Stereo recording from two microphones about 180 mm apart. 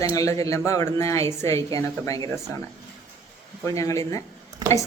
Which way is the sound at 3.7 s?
15° left (ahead or behind).